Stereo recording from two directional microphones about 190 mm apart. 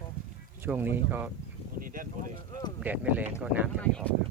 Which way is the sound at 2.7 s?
10° right (ahead or behind).